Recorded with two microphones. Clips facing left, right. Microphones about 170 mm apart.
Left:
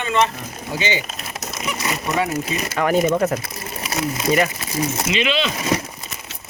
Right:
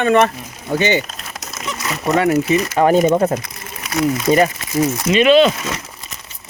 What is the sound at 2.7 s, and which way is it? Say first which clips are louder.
Speech: right 4 dB; 30° right (ahead or behind).